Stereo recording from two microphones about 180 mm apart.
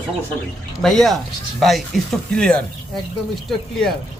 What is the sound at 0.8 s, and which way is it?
Speech, centre (ahead or behind).